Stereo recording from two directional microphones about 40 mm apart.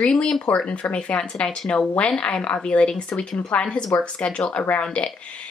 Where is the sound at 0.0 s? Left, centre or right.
Left.